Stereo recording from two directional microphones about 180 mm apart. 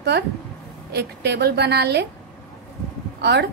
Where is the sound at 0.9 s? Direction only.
65° right (ahead or behind).